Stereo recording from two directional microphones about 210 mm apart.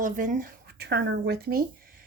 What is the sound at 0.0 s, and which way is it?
A woman's voice, 40° right (ahead or behind).